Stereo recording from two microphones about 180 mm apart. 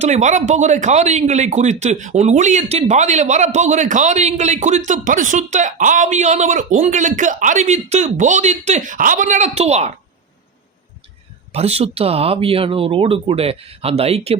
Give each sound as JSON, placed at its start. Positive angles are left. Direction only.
{"t": 0.0, "sound": "speech", "side_deg": -40}
{"t": 11.5, "sound": "speech", "side_deg": -35}